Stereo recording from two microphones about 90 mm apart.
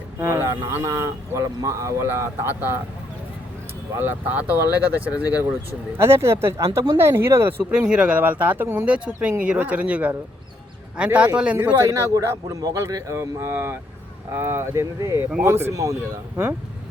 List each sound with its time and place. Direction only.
0.2 s a man's voice: 30° right (ahead or behind)
2.0 s speech: 25° right (ahead or behind)
3.9 s speech: 20° right (ahead or behind)
6.0 s a man's voice: 30° right (ahead or behind)
7.7 s speech: 10° right (ahead or behind)
11.8 s a man's voice: 40° right (ahead or behind)
15.7 s a man's voice: 40° right (ahead or behind)